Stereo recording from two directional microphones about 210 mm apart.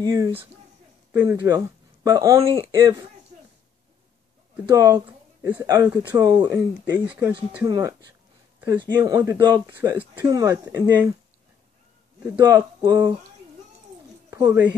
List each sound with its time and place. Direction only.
0.0 s speech: 15° right (ahead or behind)
4.6 s speech: 15° right (ahead or behind)
12.4 s speech: 15° right (ahead or behind)
14.3 s speech: 15° right (ahead or behind)